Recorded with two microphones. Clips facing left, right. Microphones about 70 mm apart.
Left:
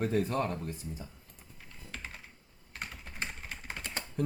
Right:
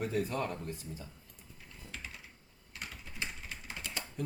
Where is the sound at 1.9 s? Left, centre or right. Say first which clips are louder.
Left 2 dB; left.